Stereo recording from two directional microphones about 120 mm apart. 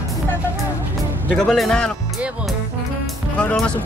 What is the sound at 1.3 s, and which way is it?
Speech, 5° left (ahead or behind).